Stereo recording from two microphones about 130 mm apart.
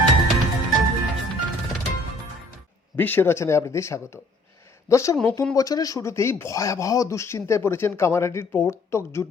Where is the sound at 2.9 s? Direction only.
15° left (ahead or behind).